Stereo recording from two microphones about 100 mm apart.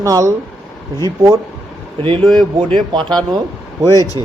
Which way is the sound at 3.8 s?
35° left (ahead or behind).